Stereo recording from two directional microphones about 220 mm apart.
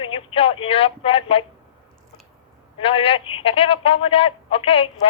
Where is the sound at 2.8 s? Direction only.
25° left (ahead or behind).